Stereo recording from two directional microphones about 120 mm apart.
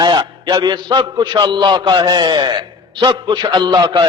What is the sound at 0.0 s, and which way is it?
A man's voice, 35° right (ahead or behind).